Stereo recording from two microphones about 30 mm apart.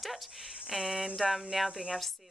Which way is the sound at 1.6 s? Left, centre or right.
Right.